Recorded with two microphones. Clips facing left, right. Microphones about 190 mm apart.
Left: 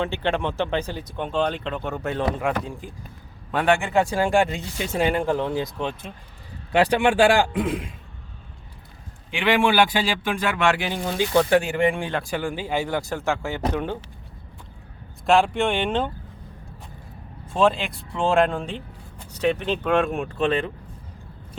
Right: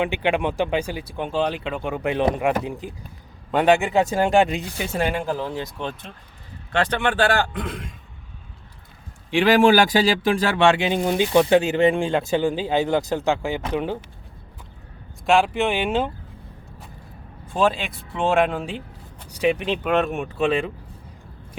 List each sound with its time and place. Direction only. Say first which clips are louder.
0.0 s speech: right 2 dB; 15° right (ahead or behind)
4.8 s a man's voice: left 3 dB; centre (ahead or behind)
9.3 s speech: right 5 dB; 40° right (ahead or behind); by 14.0 s 10° right (ahead or behind)
15.3 s speech: even; centre (ahead or behind)
17.5 s speech: left 1 dB; centre (ahead or behind)